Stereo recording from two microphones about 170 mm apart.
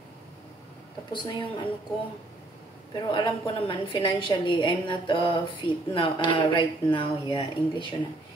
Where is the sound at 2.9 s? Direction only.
25° left (ahead or behind).